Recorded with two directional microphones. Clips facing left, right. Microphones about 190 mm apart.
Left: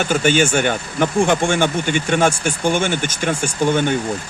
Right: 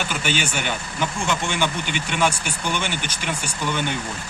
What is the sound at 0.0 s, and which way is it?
Speech, 50° left (ahead or behind).